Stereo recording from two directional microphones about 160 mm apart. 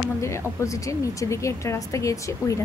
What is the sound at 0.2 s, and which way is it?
A woman's voice, 20° left (ahead or behind).